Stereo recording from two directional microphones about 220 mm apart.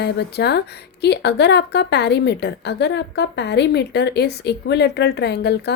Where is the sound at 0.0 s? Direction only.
50° left (ahead or behind).